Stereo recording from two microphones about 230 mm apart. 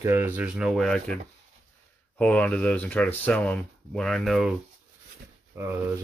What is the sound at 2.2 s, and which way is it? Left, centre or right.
Speech, centre.